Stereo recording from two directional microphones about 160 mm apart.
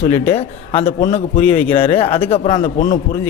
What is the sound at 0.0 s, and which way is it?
A man's voice, 45° left (ahead or behind).